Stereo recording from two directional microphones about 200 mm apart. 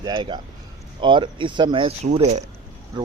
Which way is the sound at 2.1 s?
35° right (ahead or behind).